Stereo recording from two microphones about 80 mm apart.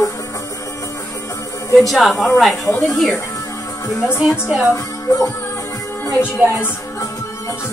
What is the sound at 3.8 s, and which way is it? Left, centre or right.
Speech, left.